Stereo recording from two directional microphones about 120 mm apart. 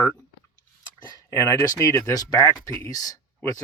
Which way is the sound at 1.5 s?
25° left (ahead or behind).